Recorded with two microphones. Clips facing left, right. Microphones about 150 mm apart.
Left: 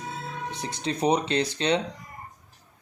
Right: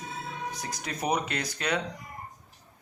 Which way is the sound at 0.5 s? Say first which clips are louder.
Left 6 dB; 30° left (ahead or behind).